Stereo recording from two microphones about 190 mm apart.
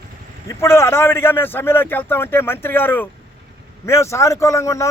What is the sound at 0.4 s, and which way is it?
Speech, 15° left (ahead or behind).